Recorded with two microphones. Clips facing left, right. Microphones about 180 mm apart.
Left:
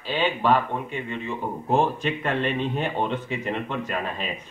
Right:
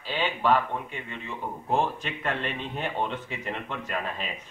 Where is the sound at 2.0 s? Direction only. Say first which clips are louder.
Left 6 dB; centre (ahead or behind).